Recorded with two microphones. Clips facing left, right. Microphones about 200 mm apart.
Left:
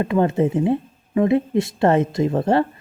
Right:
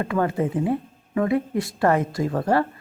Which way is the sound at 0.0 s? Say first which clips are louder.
Left 5 dB; 25° left (ahead or behind).